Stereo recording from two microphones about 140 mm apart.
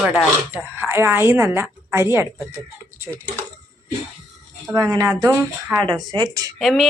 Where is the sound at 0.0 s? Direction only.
10° right (ahead or behind).